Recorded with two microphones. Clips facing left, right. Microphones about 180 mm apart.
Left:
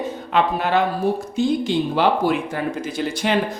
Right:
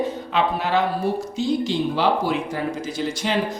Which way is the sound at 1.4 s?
55° left (ahead or behind).